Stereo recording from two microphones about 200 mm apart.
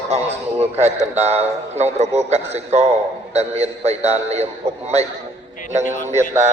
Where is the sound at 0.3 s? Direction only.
30° right (ahead or behind).